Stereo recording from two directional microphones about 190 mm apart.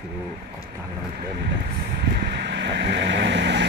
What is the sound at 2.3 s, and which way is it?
Vehicle, 65° right (ahead or behind).